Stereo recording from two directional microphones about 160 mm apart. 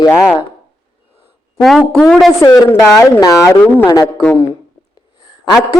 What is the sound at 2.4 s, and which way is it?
A man's voice, 20° left (ahead or behind).